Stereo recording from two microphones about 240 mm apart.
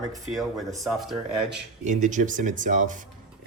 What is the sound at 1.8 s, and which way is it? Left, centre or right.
Speech, right.